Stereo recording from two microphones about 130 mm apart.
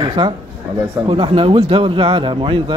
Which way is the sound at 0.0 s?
40° right (ahead or behind).